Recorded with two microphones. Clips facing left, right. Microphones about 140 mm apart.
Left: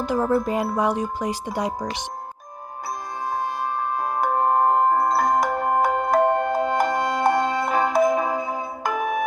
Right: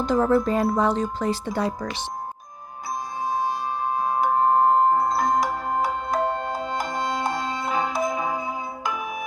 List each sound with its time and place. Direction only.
0.0 s speech: 10° left (ahead or behind)
3.2 s music: 55° left (ahead or behind)